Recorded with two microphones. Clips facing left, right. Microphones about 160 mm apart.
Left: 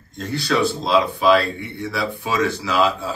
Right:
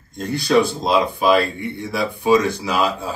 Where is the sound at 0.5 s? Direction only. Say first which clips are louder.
Right 3 dB; 15° right (ahead or behind).